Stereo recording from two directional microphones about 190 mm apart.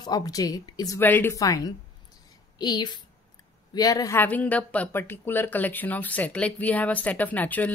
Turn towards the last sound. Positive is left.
turn(degrees=10)  # may be behind; listen again after turning